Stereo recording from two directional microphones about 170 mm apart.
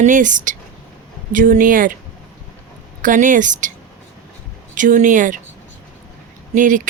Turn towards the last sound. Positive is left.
turn(degrees=-50)  # may be behind; listen again after turning